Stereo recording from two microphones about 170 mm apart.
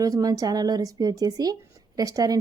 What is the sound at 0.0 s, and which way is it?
A woman's voice, 20° right (ahead or behind).